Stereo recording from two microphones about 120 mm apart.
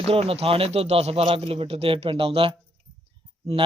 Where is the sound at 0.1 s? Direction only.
55° right (ahead or behind).